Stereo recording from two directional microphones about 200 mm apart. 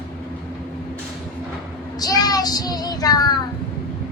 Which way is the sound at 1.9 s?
20° left (ahead or behind).